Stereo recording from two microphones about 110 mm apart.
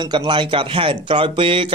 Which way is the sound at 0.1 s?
45° right (ahead or behind).